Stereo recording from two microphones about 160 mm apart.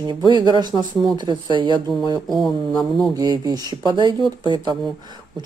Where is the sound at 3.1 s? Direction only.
25° right (ahead or behind).